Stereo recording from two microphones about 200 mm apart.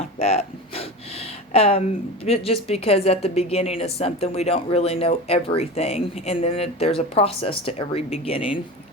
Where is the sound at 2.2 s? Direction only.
30° left (ahead or behind).